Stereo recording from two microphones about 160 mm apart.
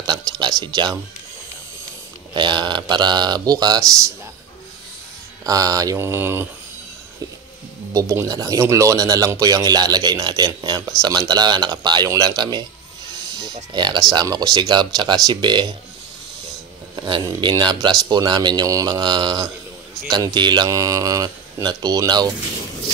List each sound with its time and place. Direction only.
0.0 s a sound: 25° right (ahead or behind)
2.3 s speech: 30° right (ahead or behind)
5.4 s speech: 25° right (ahead or behind)
7.9 s speech: 20° right (ahead or behind)
13.7 s speech: 25° right (ahead or behind)
16.9 s speech: 25° right (ahead or behind)